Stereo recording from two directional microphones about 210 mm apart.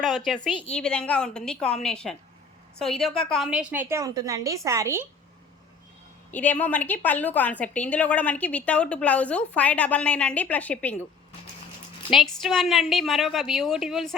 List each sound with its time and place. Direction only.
0.0 s a woman's voice: centre (ahead or behind)
6.3 s a woman's voice: 10° left (ahead or behind)
12.1 s a woman's voice: centre (ahead or behind)